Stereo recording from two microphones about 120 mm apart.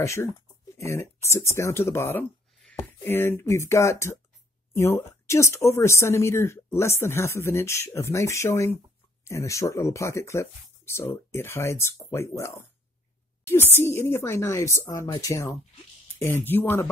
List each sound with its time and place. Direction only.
0.0 s speech: 25° left (ahead or behind)